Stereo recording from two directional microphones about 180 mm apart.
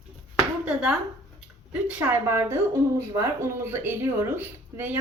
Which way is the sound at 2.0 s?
15° right (ahead or behind).